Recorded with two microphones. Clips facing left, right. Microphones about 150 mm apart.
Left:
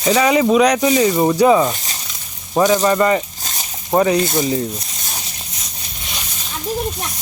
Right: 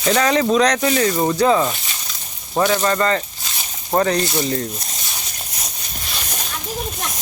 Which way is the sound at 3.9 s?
10° left (ahead or behind).